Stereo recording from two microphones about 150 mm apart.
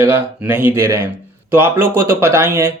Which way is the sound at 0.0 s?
15° right (ahead or behind).